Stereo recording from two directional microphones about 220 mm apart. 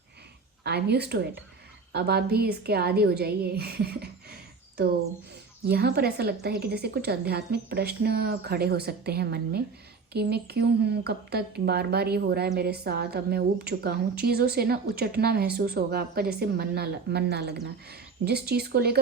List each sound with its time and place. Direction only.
0.6 s speech: 50° right (ahead or behind)
5.6 s speech: 45° right (ahead or behind)